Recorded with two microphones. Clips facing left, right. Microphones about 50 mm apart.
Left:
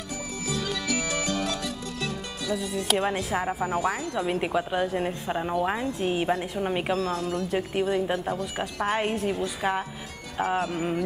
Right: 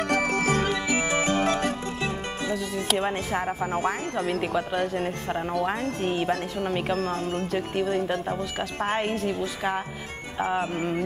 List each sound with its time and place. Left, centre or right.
0.1 s music: right
0.7 s music: right
3.0 s speech: centre
7.0 s speech: right
9.0 s speech: centre